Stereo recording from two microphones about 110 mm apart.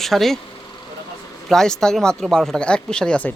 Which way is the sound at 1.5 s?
5° left (ahead or behind).